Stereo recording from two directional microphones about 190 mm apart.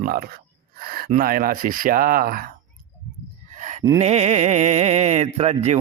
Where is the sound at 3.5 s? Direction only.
40° right (ahead or behind).